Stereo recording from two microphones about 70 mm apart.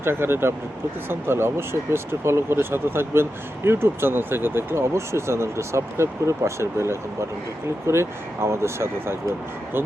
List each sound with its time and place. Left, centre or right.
0.0 s speech: right